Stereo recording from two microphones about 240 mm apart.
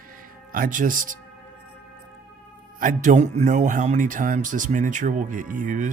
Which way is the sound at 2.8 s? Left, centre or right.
Right.